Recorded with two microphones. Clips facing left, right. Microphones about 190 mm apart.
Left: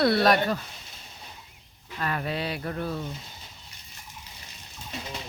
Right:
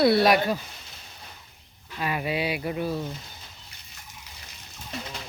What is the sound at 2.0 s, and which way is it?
Speech, 10° right (ahead or behind).